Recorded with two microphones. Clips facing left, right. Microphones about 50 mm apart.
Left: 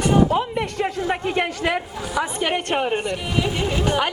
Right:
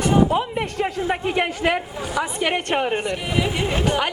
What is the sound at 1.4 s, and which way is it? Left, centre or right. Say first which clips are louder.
Speech: right 2 dB; centre.